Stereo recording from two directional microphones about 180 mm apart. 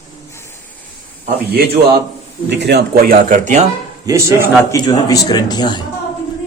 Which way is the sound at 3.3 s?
40° right (ahead or behind).